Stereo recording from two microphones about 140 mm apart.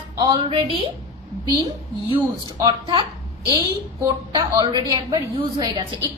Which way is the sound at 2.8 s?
40° right (ahead or behind).